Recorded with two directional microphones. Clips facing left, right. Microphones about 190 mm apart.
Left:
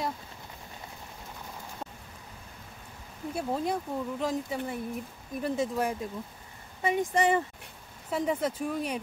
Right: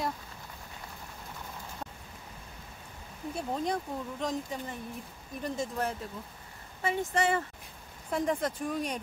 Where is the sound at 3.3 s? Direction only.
5° left (ahead or behind).